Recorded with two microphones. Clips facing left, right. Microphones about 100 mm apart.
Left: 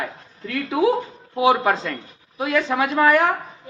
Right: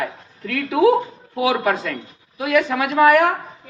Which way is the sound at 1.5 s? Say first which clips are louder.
Left 2 dB; 25° left (ahead or behind).